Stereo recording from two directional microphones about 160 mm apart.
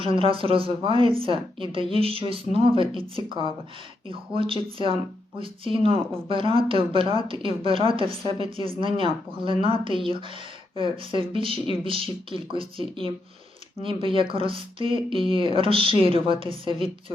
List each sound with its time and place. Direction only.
0.0 s a woman's voice: 35° right (ahead or behind)